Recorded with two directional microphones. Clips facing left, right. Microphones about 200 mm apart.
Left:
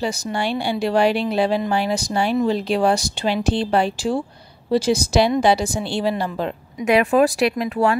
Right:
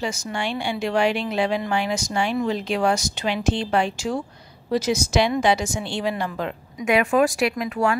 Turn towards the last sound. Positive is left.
turn(degrees=35)  # may be behind; listen again after turning